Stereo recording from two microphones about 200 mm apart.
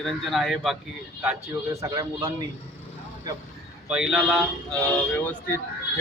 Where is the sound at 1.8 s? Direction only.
15° right (ahead or behind).